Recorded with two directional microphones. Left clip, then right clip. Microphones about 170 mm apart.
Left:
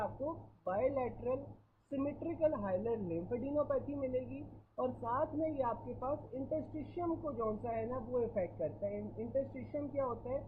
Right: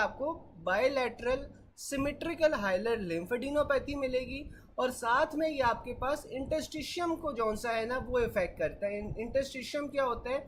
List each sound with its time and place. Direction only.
0.6 s a woman's voice: 25° right (ahead or behind)